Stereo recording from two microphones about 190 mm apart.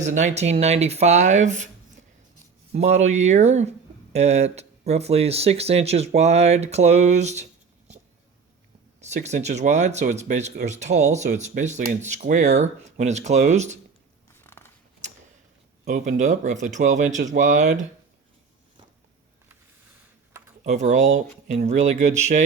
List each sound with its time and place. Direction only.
0.0 s speech: 40° right (ahead or behind)
9.0 s speech: 35° right (ahead or behind)
14.4 s scissors: 10° left (ahead or behind)
15.9 s speech: 40° right (ahead or behind)
20.7 s speech: 40° right (ahead or behind)